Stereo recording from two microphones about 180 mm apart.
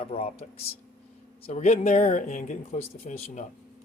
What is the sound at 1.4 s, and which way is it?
Speech, 40° left (ahead or behind).